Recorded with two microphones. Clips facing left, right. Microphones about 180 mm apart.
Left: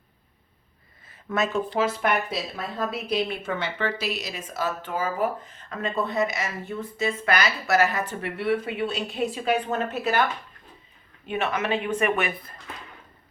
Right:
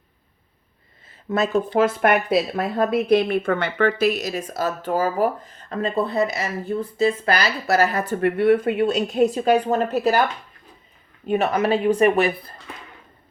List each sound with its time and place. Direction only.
1.0 s a sound: 30° right (ahead or behind)
1.7 s a woman's voice: 50° right (ahead or behind)
11.3 s a woman's voice: 40° right (ahead or behind)